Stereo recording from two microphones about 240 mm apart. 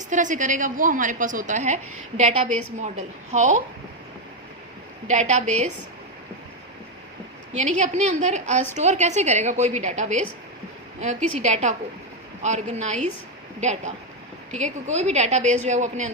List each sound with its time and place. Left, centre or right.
0.1 s a woman's voice: right
5.0 s a woman's voice: right
7.5 s a woman's voice: right